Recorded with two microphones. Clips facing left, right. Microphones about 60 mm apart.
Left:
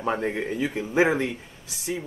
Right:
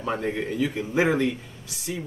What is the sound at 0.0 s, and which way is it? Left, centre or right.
Speech, centre.